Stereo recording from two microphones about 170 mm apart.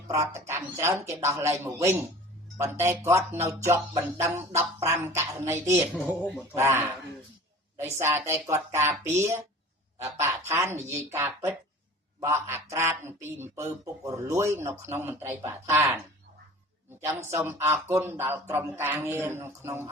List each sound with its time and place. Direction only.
0.1 s speech: 15° right (ahead or behind)
7.9 s speech: 15° right (ahead or behind)
10.5 s speech: 15° right (ahead or behind)